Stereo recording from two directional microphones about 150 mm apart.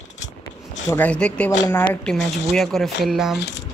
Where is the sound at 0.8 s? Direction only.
10° left (ahead or behind).